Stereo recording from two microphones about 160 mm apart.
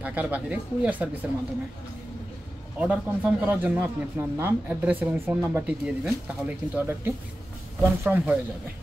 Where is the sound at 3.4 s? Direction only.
10° right (ahead or behind).